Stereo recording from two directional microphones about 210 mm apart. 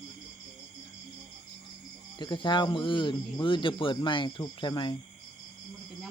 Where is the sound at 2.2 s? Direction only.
20° left (ahead or behind).